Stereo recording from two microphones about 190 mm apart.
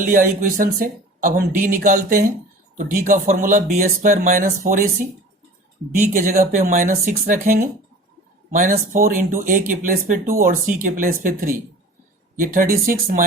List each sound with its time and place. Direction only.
0.0 s speech: 45° right (ahead or behind)